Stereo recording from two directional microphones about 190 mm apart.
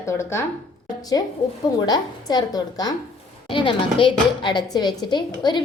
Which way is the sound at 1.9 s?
20° left (ahead or behind).